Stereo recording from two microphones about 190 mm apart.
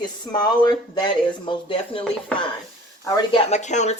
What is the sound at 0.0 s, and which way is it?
Speech, 20° left (ahead or behind).